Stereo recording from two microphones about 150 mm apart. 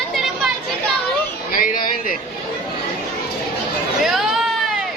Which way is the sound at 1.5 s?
70° left (ahead or behind).